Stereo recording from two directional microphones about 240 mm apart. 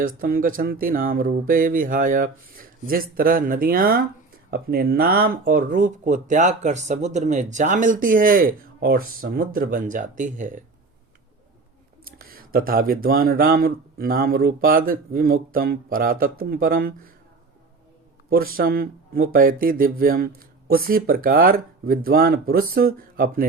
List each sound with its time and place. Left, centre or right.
0.0 s speech: right
12.2 s speech: right
18.3 s speech: right